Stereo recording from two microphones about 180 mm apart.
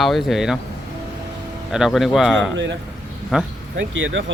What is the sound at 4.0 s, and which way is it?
Speech, 90° right.